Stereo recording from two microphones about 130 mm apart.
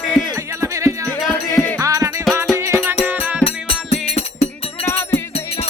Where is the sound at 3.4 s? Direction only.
50° left (ahead or behind).